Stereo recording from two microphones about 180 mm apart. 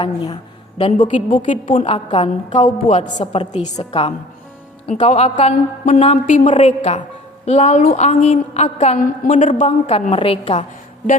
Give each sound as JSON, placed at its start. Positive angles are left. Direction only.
{"t": 0.0, "sound": "a woman's voice", "side_deg": 30}
{"t": 0.9, "sound": "a woman's voice", "side_deg": 45}
{"t": 1.9, "sound": "a woman's voice", "side_deg": 30}